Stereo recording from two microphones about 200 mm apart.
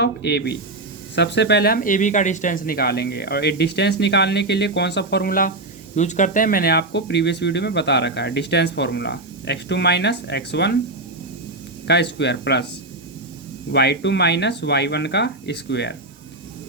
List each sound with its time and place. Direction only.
0.0 s speech: 60° left (ahead or behind)
11.9 s speech: 60° left (ahead or behind)
13.7 s speech: 60° left (ahead or behind)